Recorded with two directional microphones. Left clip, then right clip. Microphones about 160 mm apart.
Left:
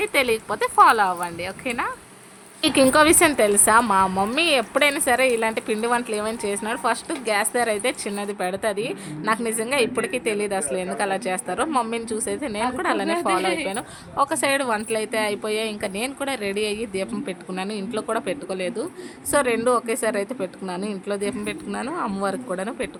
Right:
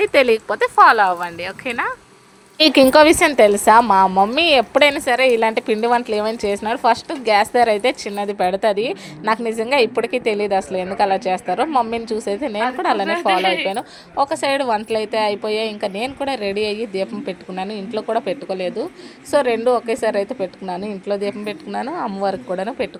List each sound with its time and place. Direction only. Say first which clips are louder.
0.0 s speech: right 7 dB; 40° right (ahead or behind)
2.9 s a woman's voice: right 5 dB; 30° right (ahead or behind)
4.0 s speech: right 7 dB; 15° right (ahead or behind)
4.4 s a woman's voice: right 4 dB; 35° right (ahead or behind)
13.1 s a woman's voice: right 5 dB; 5° left (ahead or behind)
13.7 s a woman's voice: right 6 dB; 20° right (ahead or behind)